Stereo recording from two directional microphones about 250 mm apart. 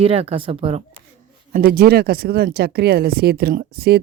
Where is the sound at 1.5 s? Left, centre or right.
Right.